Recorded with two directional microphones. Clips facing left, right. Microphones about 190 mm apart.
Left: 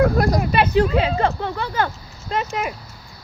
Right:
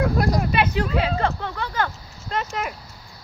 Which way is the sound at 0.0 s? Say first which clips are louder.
Left 4 dB; 40° left (ahead or behind).